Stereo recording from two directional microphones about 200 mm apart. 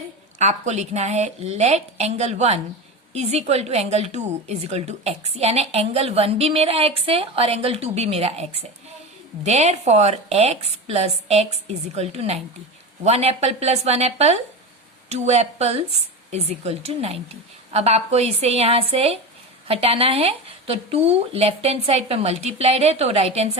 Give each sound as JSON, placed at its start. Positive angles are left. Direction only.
{"t": 0.3, "sound": "a woman's voice", "side_deg": -35}